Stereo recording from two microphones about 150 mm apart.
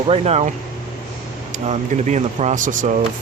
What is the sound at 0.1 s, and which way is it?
Speech, 45° right (ahead or behind).